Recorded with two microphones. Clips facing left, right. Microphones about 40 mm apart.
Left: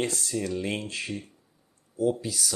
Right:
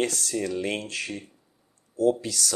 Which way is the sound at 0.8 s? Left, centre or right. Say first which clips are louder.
Right 1 dB; right.